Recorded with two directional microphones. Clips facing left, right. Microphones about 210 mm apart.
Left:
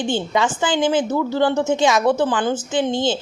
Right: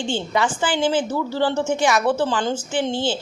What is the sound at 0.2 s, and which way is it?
Speech, 20° left (ahead or behind).